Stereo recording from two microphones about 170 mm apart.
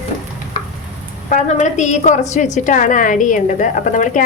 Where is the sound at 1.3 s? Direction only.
45° left (ahead or behind).